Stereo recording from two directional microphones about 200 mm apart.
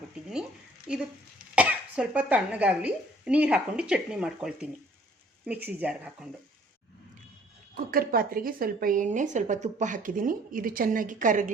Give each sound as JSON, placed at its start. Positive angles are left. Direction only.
{"t": 0.9, "sound": "speech", "side_deg": -5}
{"t": 7.9, "sound": "a woman's voice", "side_deg": -45}